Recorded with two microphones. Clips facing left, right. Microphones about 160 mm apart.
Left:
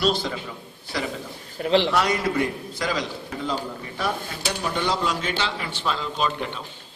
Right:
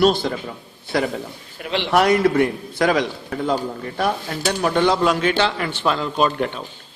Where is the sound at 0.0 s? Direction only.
55° right (ahead or behind).